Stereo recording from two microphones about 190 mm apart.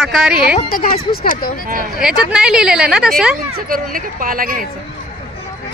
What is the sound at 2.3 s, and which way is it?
A woman's voice, 5° right (ahead or behind).